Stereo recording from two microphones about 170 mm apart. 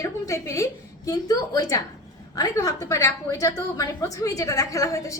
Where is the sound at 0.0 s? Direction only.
15° left (ahead or behind).